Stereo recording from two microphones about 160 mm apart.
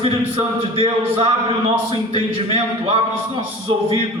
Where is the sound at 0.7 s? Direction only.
35° right (ahead or behind).